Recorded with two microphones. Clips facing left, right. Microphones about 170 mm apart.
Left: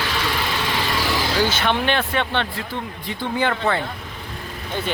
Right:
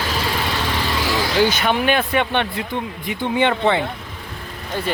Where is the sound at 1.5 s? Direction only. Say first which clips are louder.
Right 2 dB; 10° right (ahead or behind).